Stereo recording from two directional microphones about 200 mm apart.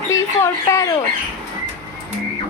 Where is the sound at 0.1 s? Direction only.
15° left (ahead or behind).